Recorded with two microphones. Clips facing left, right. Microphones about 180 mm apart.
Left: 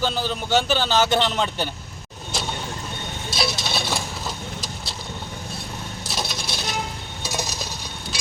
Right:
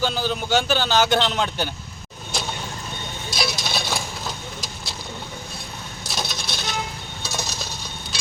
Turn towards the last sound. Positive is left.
turn(degrees=15)  # may be behind; listen again after turning